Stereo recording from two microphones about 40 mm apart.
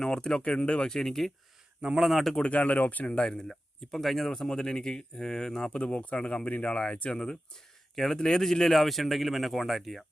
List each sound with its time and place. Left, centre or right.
0.0 s speech: centre
0.9 s speech: centre
1.8 s speech: right
2.0 s speech: centre
2.4 s speech: left
3.1 s speech: left
3.3 s speech: centre
4.3 s speech: centre
5.8 s speech: left
7.1 s speech: centre
7.9 s speech: centre